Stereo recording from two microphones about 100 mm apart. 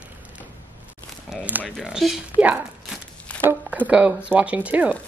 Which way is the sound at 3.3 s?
15° left (ahead or behind).